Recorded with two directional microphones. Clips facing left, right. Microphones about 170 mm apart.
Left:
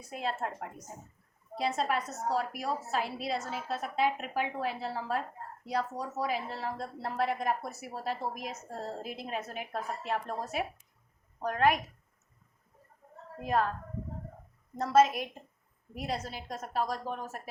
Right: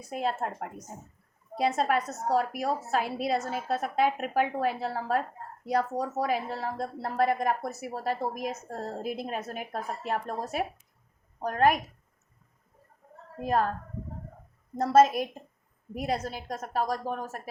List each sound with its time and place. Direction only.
0.1 s speech: 45° right (ahead or behind)
1.5 s a woman's voice: 45° right (ahead or behind)
13.4 s a woman's voice: 40° right (ahead or behind)
14.8 s a woman's voice: 40° right (ahead or behind)